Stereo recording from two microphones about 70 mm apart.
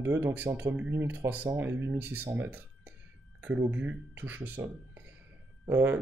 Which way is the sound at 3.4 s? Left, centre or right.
Right.